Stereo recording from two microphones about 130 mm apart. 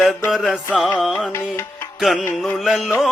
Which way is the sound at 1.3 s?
20° left (ahead or behind).